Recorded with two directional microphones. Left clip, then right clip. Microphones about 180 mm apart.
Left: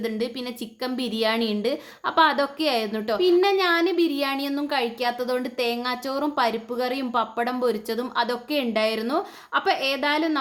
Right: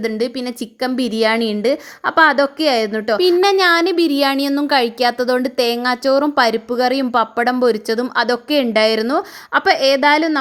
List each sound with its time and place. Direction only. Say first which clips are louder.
0.0 s a woman's voice: right 8 dB; 40° right (ahead or behind)